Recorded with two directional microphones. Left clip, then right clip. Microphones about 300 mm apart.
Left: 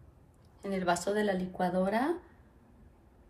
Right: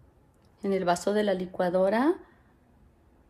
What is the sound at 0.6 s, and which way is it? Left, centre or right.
Speech, right.